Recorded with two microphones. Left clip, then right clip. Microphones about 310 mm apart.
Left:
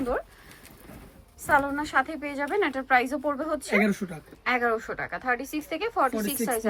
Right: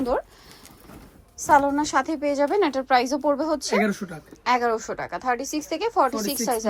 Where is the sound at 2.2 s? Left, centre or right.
Centre.